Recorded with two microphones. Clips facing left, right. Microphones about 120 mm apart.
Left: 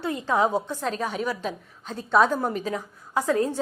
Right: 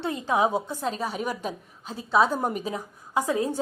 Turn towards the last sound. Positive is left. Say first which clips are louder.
# left 2 dB
turn(degrees=-15)  # may be behind; listen again after turning